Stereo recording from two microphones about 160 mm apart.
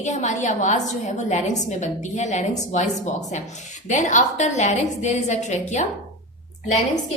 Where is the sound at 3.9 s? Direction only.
50° left (ahead or behind).